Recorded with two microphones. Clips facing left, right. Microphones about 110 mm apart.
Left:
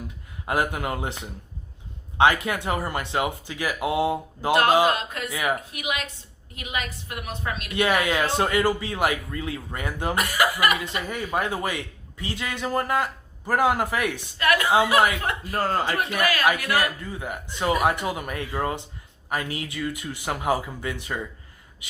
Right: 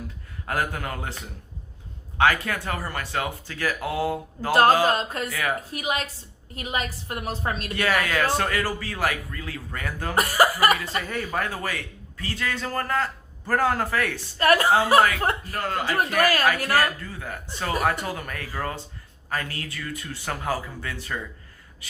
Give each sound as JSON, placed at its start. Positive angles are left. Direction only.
{"t": 0.4, "sound": "speech", "side_deg": 20}
{"t": 4.9, "sound": "a woman's voice", "side_deg": -35}
{"t": 5.3, "sound": "speech", "side_deg": 20}
{"t": 5.7, "sound": "a woman's voice", "side_deg": -35}
{"t": 7.8, "sound": "speech", "side_deg": 20}
{"t": 10.2, "sound": "a woman's voice", "side_deg": -35}
{"t": 11.0, "sound": "a man's voice", "side_deg": 15}
{"t": 14.3, "sound": "a woman's voice", "side_deg": -40}
{"t": 15.5, "sound": "a man's voice", "side_deg": 35}
{"t": 15.9, "sound": "a woman's voice", "side_deg": -40}
{"t": 16.7, "sound": "a man's voice", "side_deg": 15}